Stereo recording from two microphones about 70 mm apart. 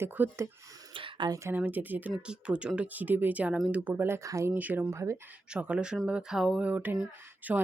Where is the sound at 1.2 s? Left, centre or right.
Right.